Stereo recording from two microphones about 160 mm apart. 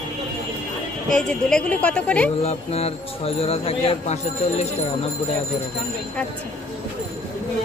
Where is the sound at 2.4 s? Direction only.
40° left (ahead or behind).